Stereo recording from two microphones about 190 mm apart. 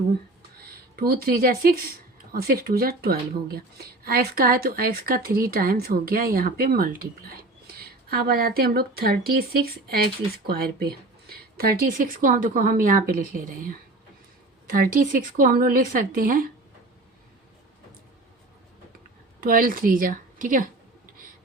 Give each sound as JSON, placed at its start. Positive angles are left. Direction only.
{"t": 0.6, "sound": "speech", "side_deg": -55}
{"t": 19.4, "sound": "a woman's voice", "side_deg": -50}